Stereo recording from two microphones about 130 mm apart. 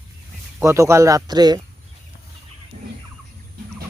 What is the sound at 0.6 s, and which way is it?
Speech, 25° right (ahead or behind).